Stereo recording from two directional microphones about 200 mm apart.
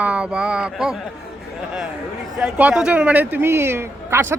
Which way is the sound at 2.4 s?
5° right (ahead or behind).